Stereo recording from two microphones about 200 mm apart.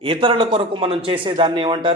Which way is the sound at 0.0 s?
25° right (ahead or behind).